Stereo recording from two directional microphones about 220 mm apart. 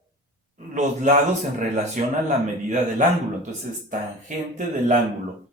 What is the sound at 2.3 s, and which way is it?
Speech, 35° right (ahead or behind).